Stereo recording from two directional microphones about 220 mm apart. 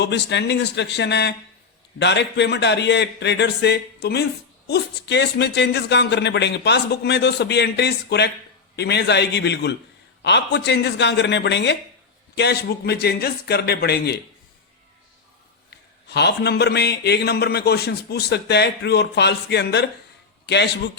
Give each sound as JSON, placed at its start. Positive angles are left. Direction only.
{"t": 0.0, "sound": "a man's voice", "side_deg": 50}
{"t": 16.0, "sound": "a man's voice", "side_deg": 50}